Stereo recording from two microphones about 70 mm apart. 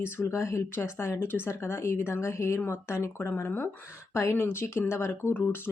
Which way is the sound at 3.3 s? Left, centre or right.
Left.